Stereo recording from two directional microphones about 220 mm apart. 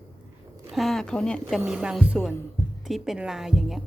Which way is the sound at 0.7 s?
Centre (ahead or behind).